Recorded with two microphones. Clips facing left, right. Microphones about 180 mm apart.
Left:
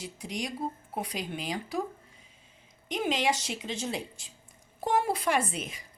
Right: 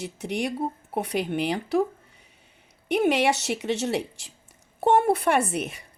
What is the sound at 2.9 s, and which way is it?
Speech, 70° right (ahead or behind).